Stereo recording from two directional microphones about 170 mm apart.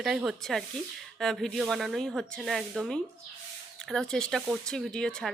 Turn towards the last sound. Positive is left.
turn(degrees=5)  # may be behind; listen again after turning